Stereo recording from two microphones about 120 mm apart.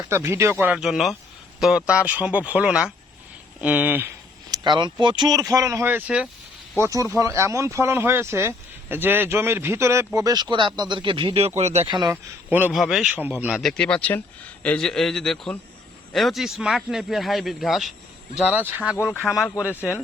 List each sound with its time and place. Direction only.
0.1 s speech: 25° right (ahead or behind)
0.8 s speech: centre (ahead or behind)
4.5 s speech: 40° right (ahead or behind); by 6.2 s 10° right (ahead or behind)
6.8 s speech: 25° right (ahead or behind); by 11.9 s 65° right (ahead or behind)
11.9 s speech: 40° right (ahead or behind)
12.1 s speech: 15° right (ahead or behind)
12.7 s speech: centre (ahead or behind)
13.1 s speech: 15° right (ahead or behind)
13.5 s speech: centre (ahead or behind)
18.3 s speech: 10° right (ahead or behind)
19.7 s speech: 20° left (ahead or behind)